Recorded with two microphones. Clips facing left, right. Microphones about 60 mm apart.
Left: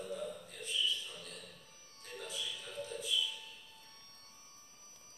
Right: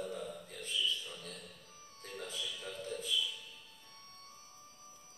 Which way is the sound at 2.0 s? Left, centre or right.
Right.